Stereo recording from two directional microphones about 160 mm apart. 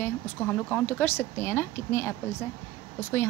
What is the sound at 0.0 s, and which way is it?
A woman's voice, 10° left (ahead or behind).